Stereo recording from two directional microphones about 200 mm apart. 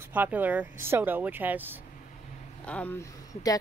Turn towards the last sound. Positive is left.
turn(degrees=15)  # may be behind; listen again after turning